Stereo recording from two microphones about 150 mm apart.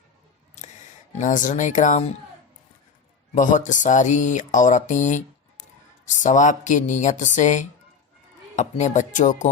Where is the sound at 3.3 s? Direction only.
55° left (ahead or behind).